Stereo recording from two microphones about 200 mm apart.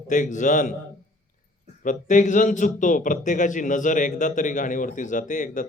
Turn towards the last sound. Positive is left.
turn(degrees=40)  # may be behind; listen again after turning